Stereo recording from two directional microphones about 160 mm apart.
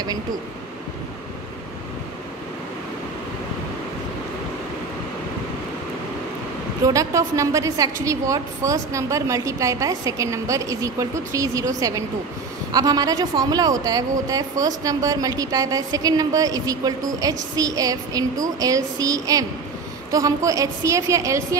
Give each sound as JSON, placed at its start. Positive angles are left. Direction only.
{"t": 6.9, "sound": "a woman's voice", "side_deg": -20}